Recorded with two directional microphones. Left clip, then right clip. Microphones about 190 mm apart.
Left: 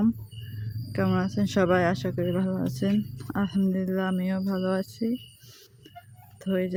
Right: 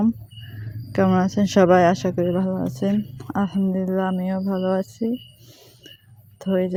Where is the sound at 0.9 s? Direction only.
20° right (ahead or behind).